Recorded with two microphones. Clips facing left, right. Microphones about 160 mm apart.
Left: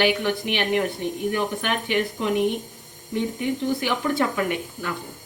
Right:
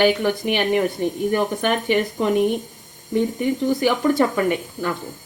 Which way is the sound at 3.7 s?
40° right (ahead or behind).